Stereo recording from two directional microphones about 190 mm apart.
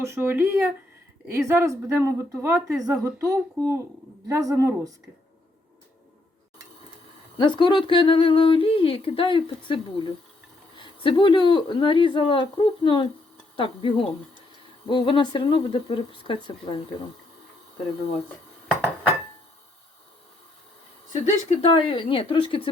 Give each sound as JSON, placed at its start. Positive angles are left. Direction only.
{"t": 0.0, "sound": "a woman's voice", "side_deg": -15}
{"t": 7.3, "sound": "speech", "side_deg": 25}
{"t": 21.1, "sound": "speech", "side_deg": 40}
{"t": 21.7, "sound": "speech", "side_deg": 25}